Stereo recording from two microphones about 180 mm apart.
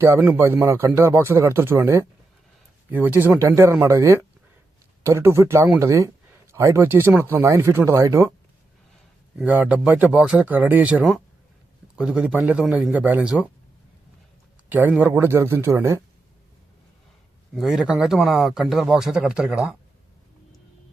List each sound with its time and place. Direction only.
0.0 s speech: 10° right (ahead or behind)
9.4 s speech: 10° right (ahead or behind)
14.7 s speech: 10° right (ahead or behind)
17.5 s speech: centre (ahead or behind)